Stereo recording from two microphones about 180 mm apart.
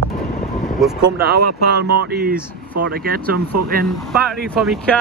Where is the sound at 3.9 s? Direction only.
Centre (ahead or behind).